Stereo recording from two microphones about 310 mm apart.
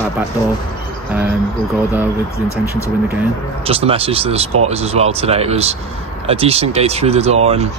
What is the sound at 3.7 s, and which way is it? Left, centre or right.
Speech, centre.